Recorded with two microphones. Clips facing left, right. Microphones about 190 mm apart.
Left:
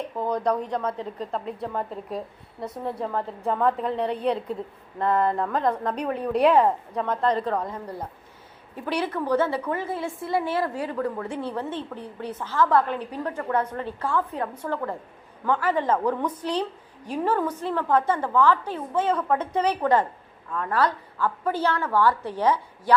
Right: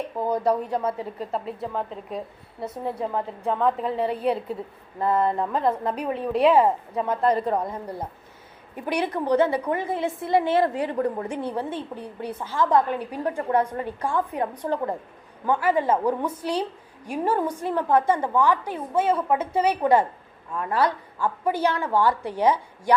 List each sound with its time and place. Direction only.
0.2 s a woman's voice: 5° right (ahead or behind)